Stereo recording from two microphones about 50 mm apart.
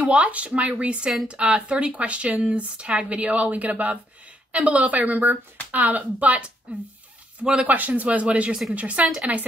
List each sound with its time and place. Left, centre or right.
0.0 s speech: right
7.6 s speech: right